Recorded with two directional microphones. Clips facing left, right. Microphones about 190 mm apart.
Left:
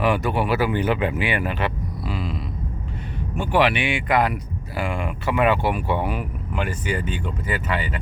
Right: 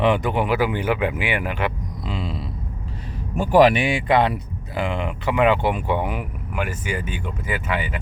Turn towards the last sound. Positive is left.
turn(degrees=-10)  # may be behind; listen again after turning